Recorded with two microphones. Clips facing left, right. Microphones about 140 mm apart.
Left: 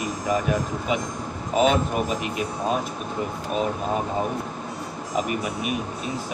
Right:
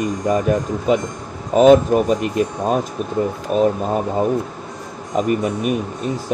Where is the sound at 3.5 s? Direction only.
40° right (ahead or behind).